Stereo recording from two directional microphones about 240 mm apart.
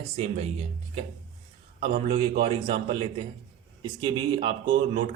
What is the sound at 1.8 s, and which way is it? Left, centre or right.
Speech, right.